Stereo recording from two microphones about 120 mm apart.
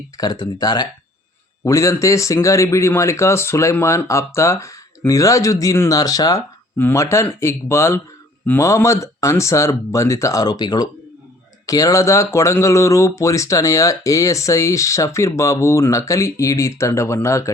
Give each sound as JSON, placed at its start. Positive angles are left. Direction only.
{"t": 0.2, "sound": "speech", "side_deg": 35}
{"t": 6.7, "sound": "speech", "side_deg": 20}